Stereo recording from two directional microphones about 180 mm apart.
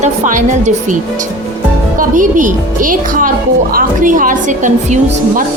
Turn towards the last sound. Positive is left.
turn(degrees=-45)  # may be behind; listen again after turning